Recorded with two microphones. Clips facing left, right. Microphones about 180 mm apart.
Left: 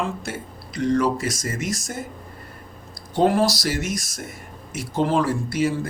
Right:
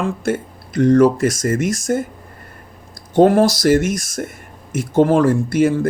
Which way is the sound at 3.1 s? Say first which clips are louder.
Right 7 dB; 50° right (ahead or behind).